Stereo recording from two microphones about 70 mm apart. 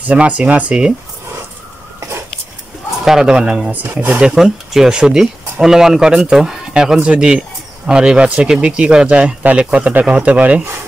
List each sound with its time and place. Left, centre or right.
0.0 s speech: centre
3.1 s speech: centre
3.7 s speech: right
4.2 s speech: centre